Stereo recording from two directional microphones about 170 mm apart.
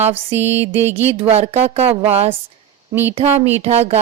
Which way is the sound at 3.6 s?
40° right (ahead or behind).